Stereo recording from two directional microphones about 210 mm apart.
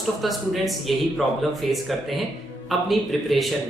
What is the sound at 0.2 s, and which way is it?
Speech, centre (ahead or behind).